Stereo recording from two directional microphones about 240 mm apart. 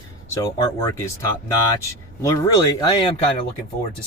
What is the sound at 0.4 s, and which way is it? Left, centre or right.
Speech, centre.